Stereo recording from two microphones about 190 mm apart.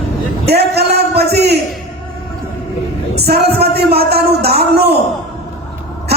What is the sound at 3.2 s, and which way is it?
Speech, 55° right (ahead or behind).